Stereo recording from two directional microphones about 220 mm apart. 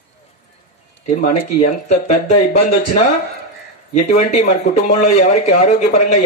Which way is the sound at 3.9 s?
35° left (ahead or behind).